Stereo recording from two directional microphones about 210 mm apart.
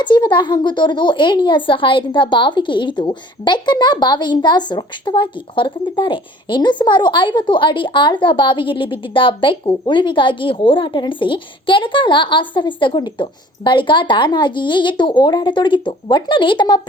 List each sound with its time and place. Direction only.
0.0 s speech: 20° left (ahead or behind)